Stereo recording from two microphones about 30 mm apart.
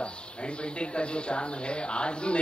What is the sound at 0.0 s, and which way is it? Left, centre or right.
Speech, left.